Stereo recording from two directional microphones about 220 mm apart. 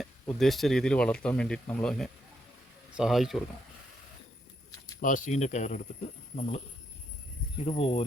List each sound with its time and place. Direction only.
0.0 s speech: centre (ahead or behind)
4.9 s speech: 35° left (ahead or behind)
7.6 s speech: 25° left (ahead or behind)